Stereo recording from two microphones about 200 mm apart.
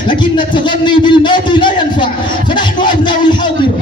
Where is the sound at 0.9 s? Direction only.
25° left (ahead or behind).